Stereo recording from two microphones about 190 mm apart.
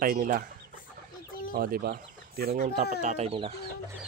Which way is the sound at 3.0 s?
35° right (ahead or behind).